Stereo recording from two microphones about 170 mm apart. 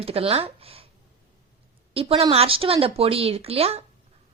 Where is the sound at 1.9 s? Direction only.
35° right (ahead or behind).